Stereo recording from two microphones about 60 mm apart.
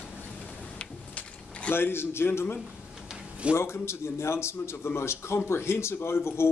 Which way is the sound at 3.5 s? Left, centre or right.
Left.